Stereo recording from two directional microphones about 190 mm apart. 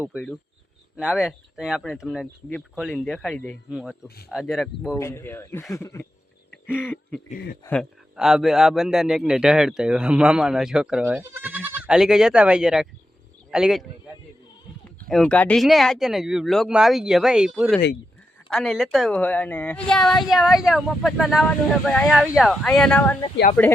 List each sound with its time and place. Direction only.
0.9 s speech: 5° right (ahead or behind)
4.9 s speech: 15° left (ahead or behind)
6.7 s speech: 5° right (ahead or behind)
7.3 s a man's voice: 50° left (ahead or behind)
7.7 s speech: centre (ahead or behind)
15.1 s speech: 5° left (ahead or behind)